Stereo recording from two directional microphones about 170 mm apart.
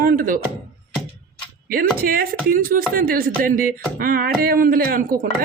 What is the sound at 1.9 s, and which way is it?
Speech, 60° right (ahead or behind).